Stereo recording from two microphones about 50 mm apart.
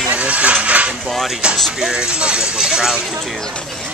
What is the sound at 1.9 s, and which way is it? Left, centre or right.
Speech, centre.